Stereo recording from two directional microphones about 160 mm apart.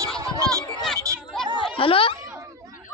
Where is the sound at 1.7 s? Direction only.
35° left (ahead or behind).